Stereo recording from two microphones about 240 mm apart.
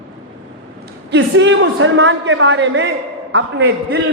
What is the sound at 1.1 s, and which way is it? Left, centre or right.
A man's voice, right.